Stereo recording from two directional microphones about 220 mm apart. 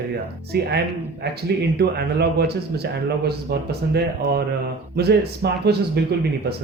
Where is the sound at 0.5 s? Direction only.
45° right (ahead or behind).